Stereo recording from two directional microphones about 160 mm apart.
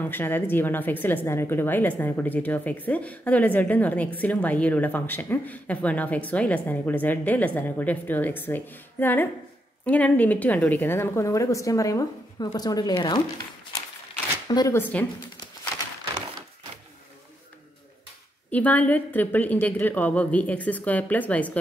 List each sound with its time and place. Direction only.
0.0 s a woman's voice: 10° left (ahead or behind)
14.5 s speech: 25° left (ahead or behind)
14.8 s a woman's voice: 10° left (ahead or behind)
18.5 s a woman's voice: 10° left (ahead or behind)